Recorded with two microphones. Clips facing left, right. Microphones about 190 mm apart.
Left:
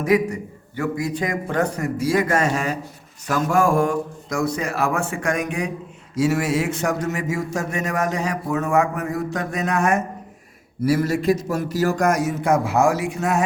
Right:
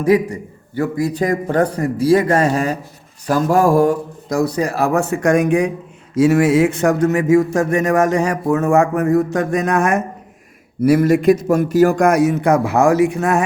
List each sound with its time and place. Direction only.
0.0 s a man's voice: 30° right (ahead or behind); by 5.7 s 50° right (ahead or behind)
6.1 s a sound: 55° right (ahead or behind)
10.8 s a man's voice: 60° right (ahead or behind)